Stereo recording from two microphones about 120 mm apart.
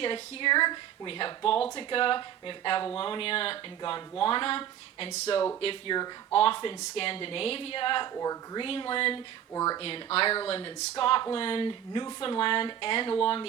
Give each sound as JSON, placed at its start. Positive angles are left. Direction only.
{"t": 0.0, "sound": "speech", "side_deg": 45}
{"t": 5.1, "sound": "speech", "side_deg": 65}
{"t": 5.5, "sound": "speech", "side_deg": 50}
{"t": 8.1, "sound": "speech", "side_deg": 30}
{"t": 8.6, "sound": "speech", "side_deg": 45}
{"t": 9.5, "sound": "speech", "side_deg": 30}
{"t": 9.8, "sound": "speech", "side_deg": 55}